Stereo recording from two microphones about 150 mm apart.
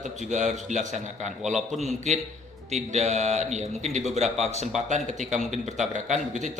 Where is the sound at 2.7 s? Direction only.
45° right (ahead or behind).